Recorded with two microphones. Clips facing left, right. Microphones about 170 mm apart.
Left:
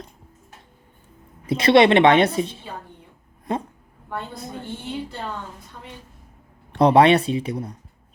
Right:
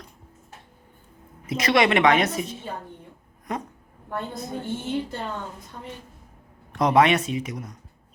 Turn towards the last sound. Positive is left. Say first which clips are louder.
# left 5 dB
turn(degrees=30)  # may be behind; listen again after turning